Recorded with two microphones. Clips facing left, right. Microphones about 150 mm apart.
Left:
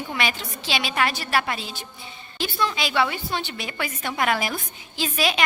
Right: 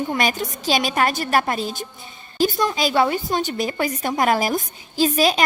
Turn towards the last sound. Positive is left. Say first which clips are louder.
# right 7 dB
turn(degrees=-40)  # may be behind; listen again after turning